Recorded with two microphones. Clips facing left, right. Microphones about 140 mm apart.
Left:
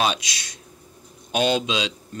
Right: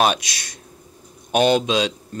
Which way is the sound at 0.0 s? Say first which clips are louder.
Right 4 dB; 55° right (ahead or behind).